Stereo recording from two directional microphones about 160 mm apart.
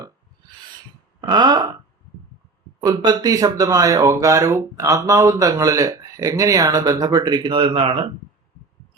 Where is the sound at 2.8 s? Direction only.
25° right (ahead or behind).